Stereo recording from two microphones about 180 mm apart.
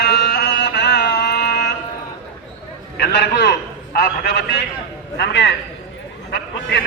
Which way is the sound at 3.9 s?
55° left (ahead or behind).